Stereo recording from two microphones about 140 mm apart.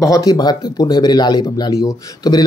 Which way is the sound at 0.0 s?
25° left (ahead or behind).